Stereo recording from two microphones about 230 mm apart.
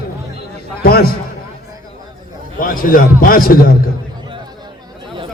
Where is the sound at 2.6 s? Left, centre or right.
Left.